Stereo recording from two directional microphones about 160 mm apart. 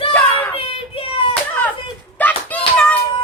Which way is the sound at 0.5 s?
35° left (ahead or behind).